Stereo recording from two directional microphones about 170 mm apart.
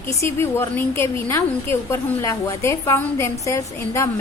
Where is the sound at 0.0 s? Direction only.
15° left (ahead or behind).